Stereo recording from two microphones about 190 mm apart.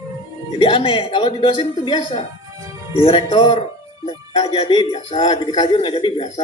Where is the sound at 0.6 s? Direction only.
25° left (ahead or behind).